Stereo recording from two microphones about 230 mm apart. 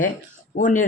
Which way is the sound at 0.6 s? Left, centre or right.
Left.